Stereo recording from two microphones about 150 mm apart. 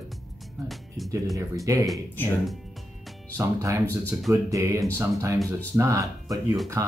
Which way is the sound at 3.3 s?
20° right (ahead or behind).